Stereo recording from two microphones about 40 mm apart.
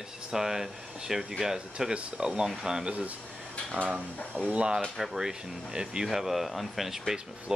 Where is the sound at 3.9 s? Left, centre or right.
Right.